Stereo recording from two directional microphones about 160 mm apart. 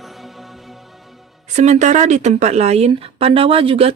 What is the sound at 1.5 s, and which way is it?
A woman's voice, 45° right (ahead or behind).